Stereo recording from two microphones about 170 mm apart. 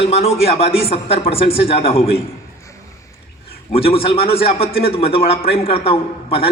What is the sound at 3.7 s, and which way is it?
Speech, 35° left (ahead or behind).